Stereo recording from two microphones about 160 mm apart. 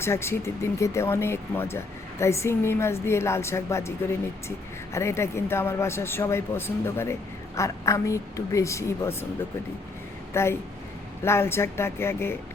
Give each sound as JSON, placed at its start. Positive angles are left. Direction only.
{"t": 0.0, "sound": "speech", "side_deg": 15}
{"t": 10.3, "sound": "speech", "side_deg": 15}